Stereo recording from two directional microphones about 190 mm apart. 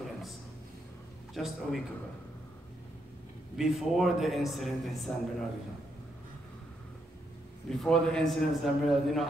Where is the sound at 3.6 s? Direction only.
Centre (ahead or behind).